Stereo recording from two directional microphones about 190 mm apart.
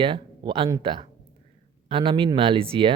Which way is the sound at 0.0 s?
25° right (ahead or behind).